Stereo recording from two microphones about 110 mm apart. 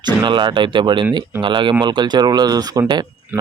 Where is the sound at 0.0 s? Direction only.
45° right (ahead or behind).